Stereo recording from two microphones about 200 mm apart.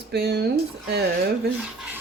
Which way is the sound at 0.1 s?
55° right (ahead or behind).